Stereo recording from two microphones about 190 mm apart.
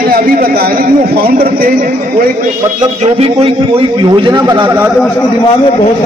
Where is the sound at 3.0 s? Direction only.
30° right (ahead or behind).